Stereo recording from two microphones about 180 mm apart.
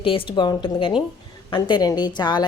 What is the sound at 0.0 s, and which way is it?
Speech, 30° left (ahead or behind).